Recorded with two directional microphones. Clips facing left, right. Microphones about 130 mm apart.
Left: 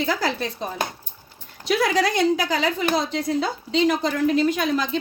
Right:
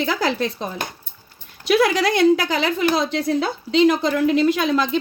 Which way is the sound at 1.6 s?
75° right (ahead or behind).